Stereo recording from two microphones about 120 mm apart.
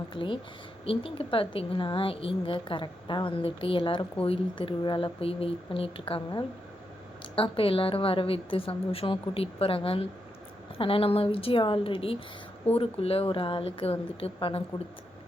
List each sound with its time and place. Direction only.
0.1 s a woman's voice: 45° left (ahead or behind)